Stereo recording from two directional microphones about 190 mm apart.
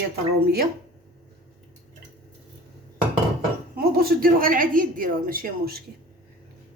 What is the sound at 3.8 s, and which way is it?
A woman's voice, 55° right (ahead or behind).